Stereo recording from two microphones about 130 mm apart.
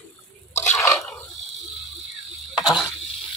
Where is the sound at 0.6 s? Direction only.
20° left (ahead or behind).